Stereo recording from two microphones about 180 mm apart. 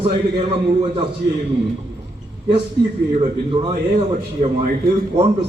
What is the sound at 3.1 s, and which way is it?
A man's voice, 35° right (ahead or behind).